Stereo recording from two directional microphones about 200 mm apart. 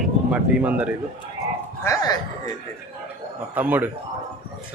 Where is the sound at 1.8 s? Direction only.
20° left (ahead or behind).